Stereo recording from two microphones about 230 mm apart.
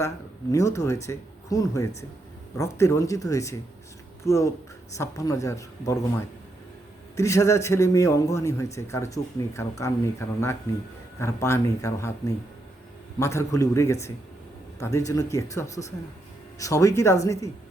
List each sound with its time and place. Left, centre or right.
0.5 s speech: centre
7.2 s speech: centre
13.1 s speech: centre